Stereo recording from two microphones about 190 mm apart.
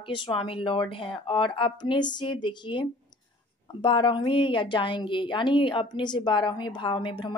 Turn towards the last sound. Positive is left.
turn(degrees=25)  # may be behind; listen again after turning